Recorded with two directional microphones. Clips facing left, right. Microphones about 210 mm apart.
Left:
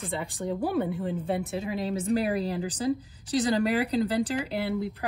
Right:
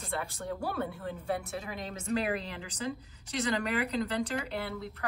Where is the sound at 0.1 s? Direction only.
15° left (ahead or behind).